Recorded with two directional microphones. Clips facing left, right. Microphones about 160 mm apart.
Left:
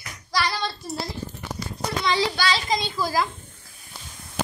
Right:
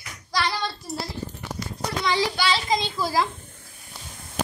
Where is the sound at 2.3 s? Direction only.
20° right (ahead or behind).